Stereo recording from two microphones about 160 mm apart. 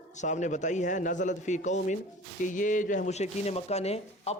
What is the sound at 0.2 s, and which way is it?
A man's voice, 50° left (ahead or behind).